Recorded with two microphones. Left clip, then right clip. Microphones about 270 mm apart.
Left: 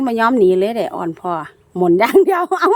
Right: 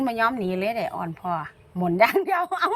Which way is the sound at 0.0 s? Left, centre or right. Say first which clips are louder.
Left 10 dB; centre.